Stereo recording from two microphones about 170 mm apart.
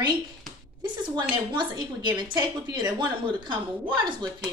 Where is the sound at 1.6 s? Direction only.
25° right (ahead or behind).